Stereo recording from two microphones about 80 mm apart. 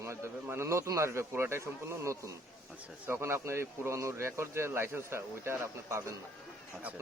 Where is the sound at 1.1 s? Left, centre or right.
Right.